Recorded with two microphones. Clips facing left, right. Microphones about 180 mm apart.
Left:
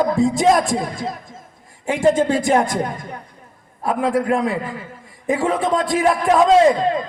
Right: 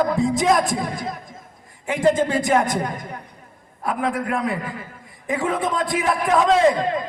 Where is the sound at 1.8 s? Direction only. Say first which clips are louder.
Left 2 dB; 25° left (ahead or behind).